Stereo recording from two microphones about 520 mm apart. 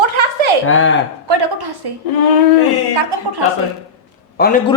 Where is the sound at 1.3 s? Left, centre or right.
Right.